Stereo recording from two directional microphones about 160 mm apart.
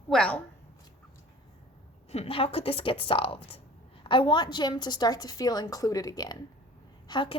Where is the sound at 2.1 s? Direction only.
40° left (ahead or behind).